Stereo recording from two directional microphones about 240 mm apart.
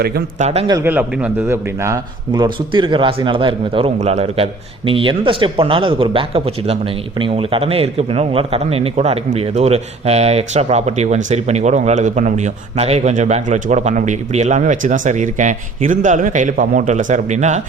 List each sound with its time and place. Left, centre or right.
0.0 s speech: right
0.7 s speech: centre; by 17.6 s right